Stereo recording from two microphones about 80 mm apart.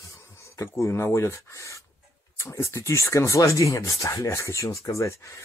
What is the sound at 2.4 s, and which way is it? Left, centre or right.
Speech, left.